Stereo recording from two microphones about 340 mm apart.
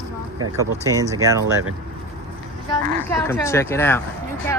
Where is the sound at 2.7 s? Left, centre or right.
Centre.